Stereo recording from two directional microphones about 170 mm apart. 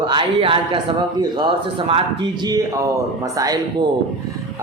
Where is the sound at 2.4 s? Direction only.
20° right (ahead or behind).